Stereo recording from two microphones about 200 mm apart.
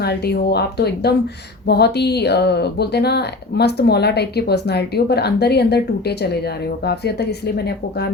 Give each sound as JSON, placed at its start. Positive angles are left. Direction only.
{"t": 0.0, "sound": "speech", "side_deg": 55}